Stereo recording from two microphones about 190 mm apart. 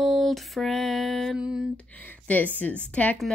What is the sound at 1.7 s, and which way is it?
A woman's voice, 10° left (ahead or behind).